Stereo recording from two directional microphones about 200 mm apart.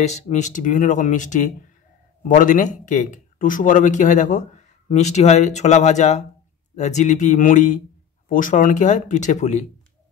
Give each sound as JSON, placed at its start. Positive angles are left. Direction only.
{"t": 0.0, "sound": "speech", "side_deg": 35}